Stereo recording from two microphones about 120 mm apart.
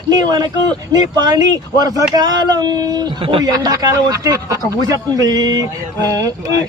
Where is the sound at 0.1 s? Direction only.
35° right (ahead or behind).